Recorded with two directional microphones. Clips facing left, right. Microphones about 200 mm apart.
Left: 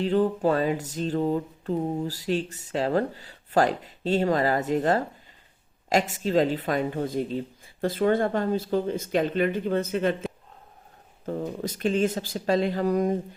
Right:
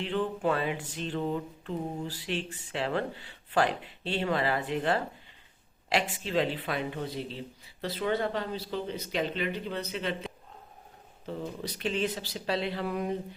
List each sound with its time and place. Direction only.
0.0 s a sound: 40° left (ahead or behind)
5.9 s speech: 45° left (ahead or behind)
11.3 s speech: 45° left (ahead or behind)